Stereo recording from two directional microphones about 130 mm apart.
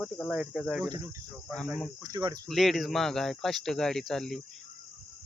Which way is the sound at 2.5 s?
Centre (ahead or behind).